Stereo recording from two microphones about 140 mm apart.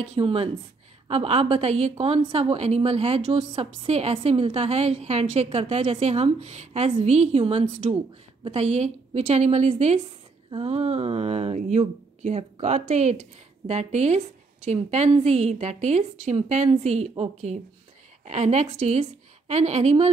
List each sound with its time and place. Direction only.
0.0 s a woman's voice: 45° right (ahead or behind)